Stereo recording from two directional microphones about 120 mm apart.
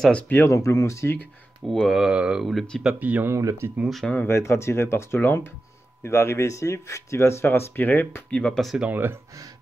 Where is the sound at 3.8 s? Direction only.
Centre (ahead or behind).